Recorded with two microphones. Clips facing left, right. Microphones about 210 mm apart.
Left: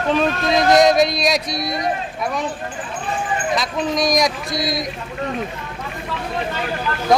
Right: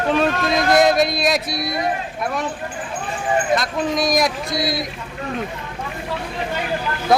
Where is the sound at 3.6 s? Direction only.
Centre (ahead or behind).